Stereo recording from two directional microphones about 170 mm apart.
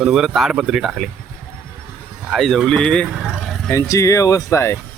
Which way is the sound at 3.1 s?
5° right (ahead or behind).